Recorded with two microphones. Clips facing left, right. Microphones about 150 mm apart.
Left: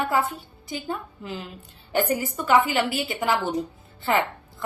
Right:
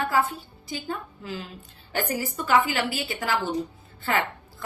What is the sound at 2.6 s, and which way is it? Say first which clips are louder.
Speech: left 3 dB; 20° left (ahead or behind).